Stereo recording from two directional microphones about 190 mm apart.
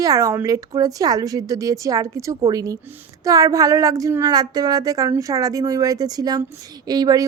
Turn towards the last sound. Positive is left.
turn(degrees=-20)  # may be behind; listen again after turning